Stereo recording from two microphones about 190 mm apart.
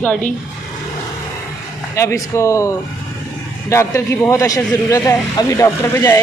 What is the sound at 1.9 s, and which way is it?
A man's voice, 15° left (ahead or behind).